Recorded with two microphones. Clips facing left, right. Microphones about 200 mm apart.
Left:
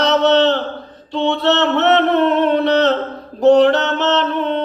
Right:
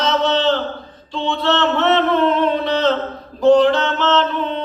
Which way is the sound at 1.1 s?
70° left (ahead or behind).